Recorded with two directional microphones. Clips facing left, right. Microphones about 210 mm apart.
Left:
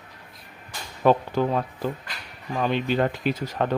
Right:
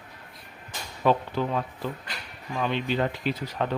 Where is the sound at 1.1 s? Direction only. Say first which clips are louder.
Left 4 dB; 45° left (ahead or behind).